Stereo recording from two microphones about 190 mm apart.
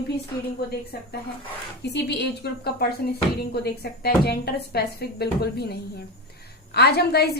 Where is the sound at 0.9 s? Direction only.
55° left (ahead or behind).